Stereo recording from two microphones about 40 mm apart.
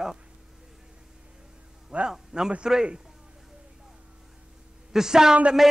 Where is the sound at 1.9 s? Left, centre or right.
Right.